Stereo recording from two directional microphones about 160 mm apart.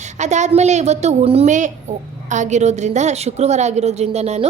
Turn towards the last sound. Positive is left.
turn(degrees=-45)  # may be behind; listen again after turning